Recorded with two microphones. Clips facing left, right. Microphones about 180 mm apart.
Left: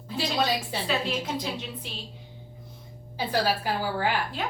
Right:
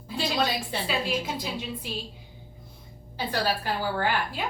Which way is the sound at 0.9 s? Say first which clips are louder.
Left 1 dB; 10° right (ahead or behind).